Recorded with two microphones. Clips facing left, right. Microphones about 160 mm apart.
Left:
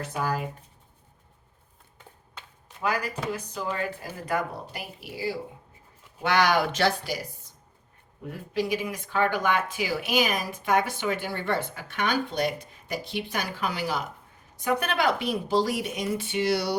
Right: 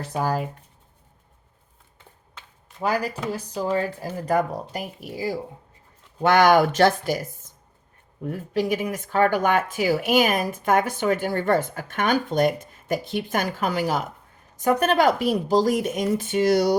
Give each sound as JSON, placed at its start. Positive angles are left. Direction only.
{"t": 0.0, "sound": "speech", "side_deg": -35}
{"t": 2.8, "sound": "speech", "side_deg": -35}